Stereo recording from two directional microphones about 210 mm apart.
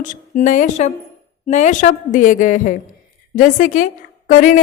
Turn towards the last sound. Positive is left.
turn(degrees=40)  # may be behind; listen again after turning